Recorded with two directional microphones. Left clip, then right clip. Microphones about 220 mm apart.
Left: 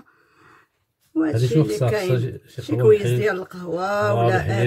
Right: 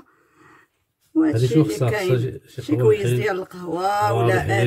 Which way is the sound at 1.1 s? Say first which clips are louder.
Right 3 dB; centre (ahead or behind).